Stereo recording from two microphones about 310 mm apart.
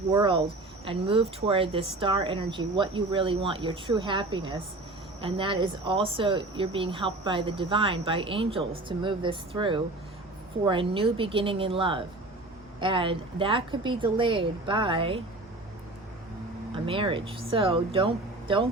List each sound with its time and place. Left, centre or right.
0.1 s speech: centre
16.7 s speech: centre